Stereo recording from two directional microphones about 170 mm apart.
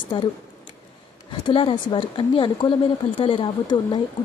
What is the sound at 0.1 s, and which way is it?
Speech, 30° left (ahead or behind).